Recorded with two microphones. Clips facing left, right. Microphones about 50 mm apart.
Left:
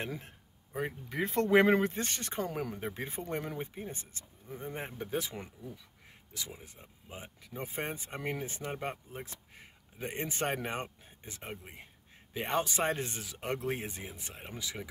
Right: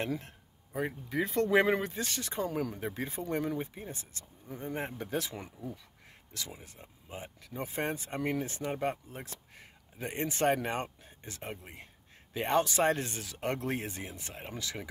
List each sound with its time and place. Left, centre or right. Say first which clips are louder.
0.0 s speech: right 4 dB; centre
1.1 s speech: left 1 dB; left
3.5 s speech: right 2 dB; centre
3.9 s speech: even; left
4.6 s speech: right 3 dB; centre
5.1 s speech: left 1 dB; centre
7.1 s speech: right 3 dB; centre
8.7 s speech: right 4 dB; centre
12.6 s speech: right 4 dB; centre